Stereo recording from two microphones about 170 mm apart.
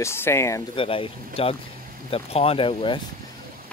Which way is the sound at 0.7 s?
30° left (ahead or behind).